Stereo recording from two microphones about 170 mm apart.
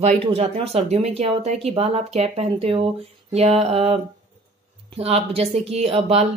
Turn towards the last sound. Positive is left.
turn(degrees=-40)  # may be behind; listen again after turning